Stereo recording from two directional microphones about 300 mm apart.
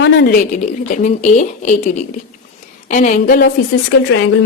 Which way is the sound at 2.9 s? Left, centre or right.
Left.